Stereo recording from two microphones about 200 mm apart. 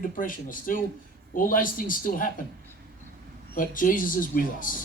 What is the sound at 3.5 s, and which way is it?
Speech, 40° left (ahead or behind).